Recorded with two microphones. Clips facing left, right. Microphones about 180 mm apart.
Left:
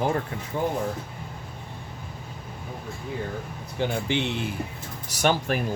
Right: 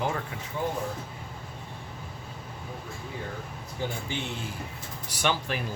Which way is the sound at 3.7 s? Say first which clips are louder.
Left 7 dB; 75° left (ahead or behind).